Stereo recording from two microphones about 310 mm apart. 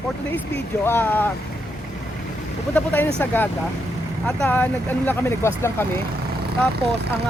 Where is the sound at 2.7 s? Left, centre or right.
Centre.